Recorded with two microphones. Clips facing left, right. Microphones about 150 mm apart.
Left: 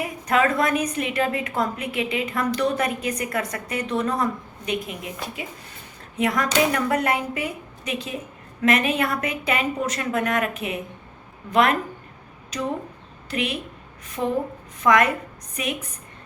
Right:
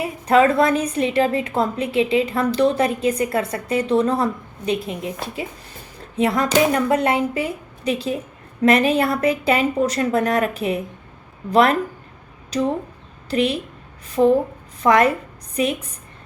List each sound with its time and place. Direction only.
0.0 s a woman's voice: 30° right (ahead or behind)